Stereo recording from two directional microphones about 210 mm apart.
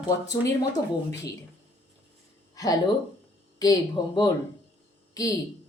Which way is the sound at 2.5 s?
15° left (ahead or behind).